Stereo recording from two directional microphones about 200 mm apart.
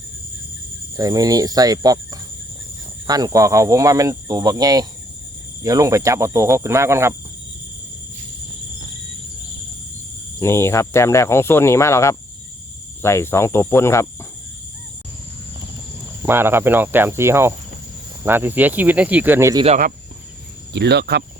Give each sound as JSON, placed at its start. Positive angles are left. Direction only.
{"t": 0.9, "sound": "speech", "side_deg": -15}
{"t": 3.1, "sound": "speech", "side_deg": -20}
{"t": 10.4, "sound": "speech", "side_deg": 15}
{"t": 16.2, "sound": "speech", "side_deg": -10}
{"t": 19.6, "sound": "speech", "side_deg": -35}
{"t": 20.7, "sound": "speech", "side_deg": -55}